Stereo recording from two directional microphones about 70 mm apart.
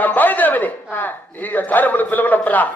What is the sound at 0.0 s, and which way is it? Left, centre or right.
A man's voice, left.